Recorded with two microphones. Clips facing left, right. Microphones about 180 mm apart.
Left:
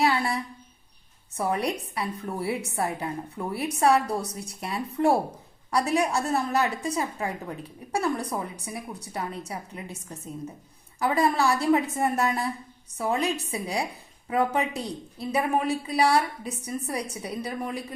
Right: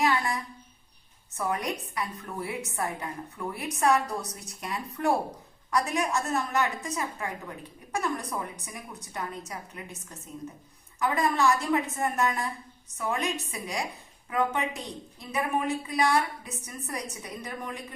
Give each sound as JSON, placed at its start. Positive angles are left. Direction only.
{"t": 0.0, "sound": "a sound", "side_deg": 30}
{"t": 1.4, "sound": "a woman's voice", "side_deg": 30}
{"t": 11.0, "sound": "a woman's voice", "side_deg": 30}